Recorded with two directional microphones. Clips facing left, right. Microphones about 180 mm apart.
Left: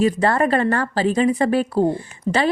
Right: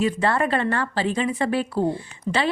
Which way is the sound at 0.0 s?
40° left (ahead or behind).